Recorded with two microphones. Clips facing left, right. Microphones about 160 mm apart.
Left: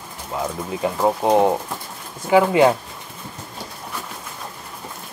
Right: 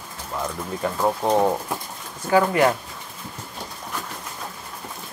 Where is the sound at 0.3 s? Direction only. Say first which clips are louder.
Left 3 dB; 15° left (ahead or behind).